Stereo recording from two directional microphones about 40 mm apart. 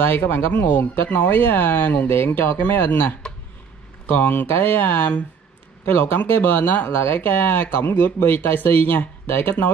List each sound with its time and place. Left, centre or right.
0.1 s speech: left
4.2 s speech: left
4.5 s speech: left
4.7 s speech: left
7.0 s speech: left